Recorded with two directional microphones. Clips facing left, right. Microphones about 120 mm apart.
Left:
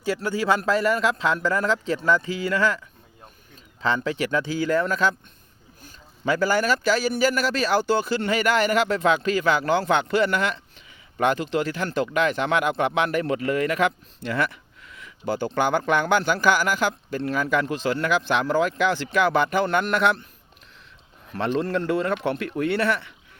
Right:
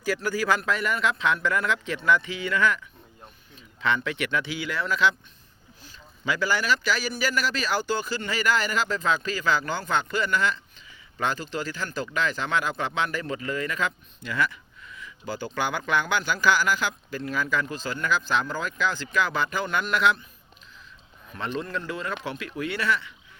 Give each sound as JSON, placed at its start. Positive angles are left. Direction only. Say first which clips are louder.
{"t": 0.0, "sound": "speech", "louder": "left 2 dB", "side_deg": 25}
{"t": 21.6, "sound": "speech", "louder": "left 8 dB", "side_deg": 65}